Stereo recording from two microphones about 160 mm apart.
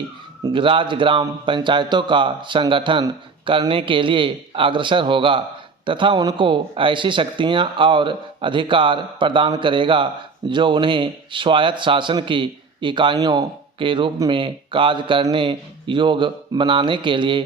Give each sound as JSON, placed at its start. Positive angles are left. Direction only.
{"t": 0.4, "sound": "speech", "side_deg": -30}